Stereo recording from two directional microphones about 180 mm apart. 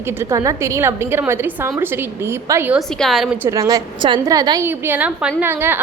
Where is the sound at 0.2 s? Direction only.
15° right (ahead or behind).